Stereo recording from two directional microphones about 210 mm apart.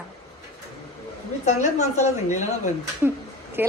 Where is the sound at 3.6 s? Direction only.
10° right (ahead or behind).